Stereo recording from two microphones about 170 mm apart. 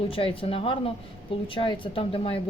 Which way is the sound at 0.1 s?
30° left (ahead or behind).